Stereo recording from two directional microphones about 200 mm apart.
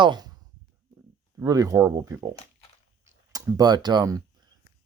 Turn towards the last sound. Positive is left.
turn(degrees=-20)  # may be behind; listen again after turning